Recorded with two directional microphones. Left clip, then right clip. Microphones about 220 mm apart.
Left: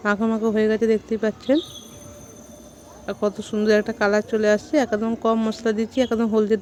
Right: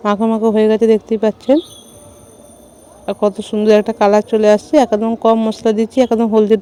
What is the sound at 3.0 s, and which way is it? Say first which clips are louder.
Speech: right 8 dB; 25° right (ahead or behind).